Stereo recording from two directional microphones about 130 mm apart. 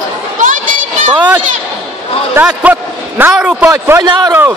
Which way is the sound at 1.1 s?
15° right (ahead or behind).